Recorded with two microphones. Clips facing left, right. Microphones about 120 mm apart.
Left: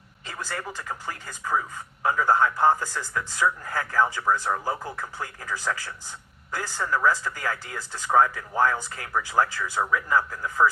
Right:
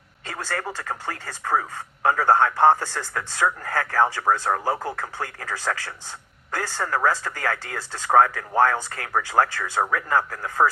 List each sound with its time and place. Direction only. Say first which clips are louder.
0.3 s speech: right 4 dB; 75° right (ahead or behind)
6.6 s speech: right 2 dB; 65° right (ahead or behind)